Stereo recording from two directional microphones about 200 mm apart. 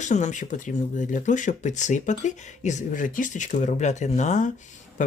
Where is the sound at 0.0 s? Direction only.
35° left (ahead or behind).